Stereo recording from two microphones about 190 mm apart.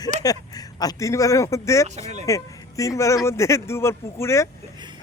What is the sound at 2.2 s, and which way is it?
Speech, 15° left (ahead or behind).